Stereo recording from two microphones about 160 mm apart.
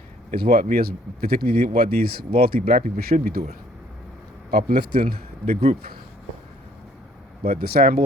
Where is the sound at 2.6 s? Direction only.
55° right (ahead or behind).